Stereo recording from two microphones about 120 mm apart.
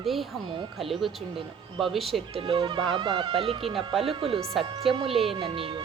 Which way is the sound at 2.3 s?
45° right (ahead or behind).